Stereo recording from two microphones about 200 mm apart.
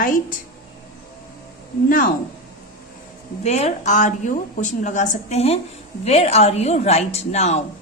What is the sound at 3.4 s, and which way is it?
Speech, 35° left (ahead or behind).